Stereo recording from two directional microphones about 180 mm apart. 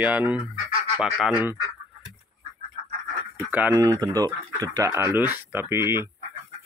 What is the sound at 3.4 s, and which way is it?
Speech, 10° right (ahead or behind).